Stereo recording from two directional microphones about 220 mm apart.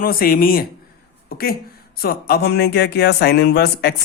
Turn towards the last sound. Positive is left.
turn(degrees=45)  # may be behind; listen again after turning